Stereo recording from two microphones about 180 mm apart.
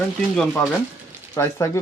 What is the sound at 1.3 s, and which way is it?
Speech, 15° left (ahead or behind).